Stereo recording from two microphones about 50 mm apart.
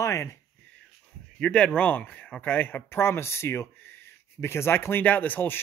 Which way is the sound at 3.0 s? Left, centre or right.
Left.